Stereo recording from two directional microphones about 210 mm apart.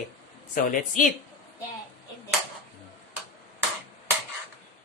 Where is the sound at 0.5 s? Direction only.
40° left (ahead or behind).